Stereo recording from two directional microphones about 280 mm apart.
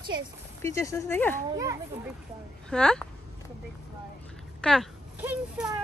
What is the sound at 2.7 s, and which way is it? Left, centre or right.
Speech, centre.